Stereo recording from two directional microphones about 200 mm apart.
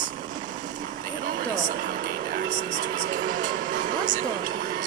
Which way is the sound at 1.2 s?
40° right (ahead or behind).